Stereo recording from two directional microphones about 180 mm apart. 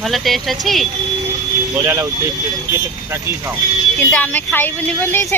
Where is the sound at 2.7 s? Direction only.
15° right (ahead or behind).